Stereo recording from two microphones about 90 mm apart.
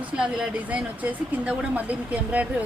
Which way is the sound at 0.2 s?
10° right (ahead or behind).